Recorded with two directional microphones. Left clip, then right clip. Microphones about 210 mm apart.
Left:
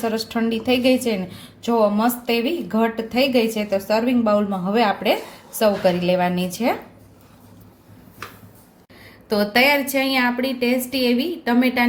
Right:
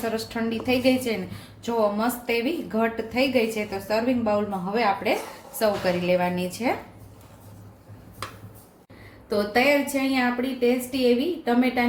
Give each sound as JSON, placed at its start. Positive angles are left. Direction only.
{"t": 0.0, "sound": "a woman's voice", "side_deg": 35}
{"t": 9.5, "sound": "a woman's voice", "side_deg": 45}